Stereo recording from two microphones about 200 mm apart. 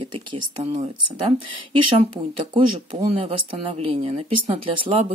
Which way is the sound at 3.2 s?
25° right (ahead or behind).